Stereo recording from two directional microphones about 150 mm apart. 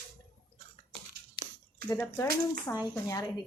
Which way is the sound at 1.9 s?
20° left (ahead or behind).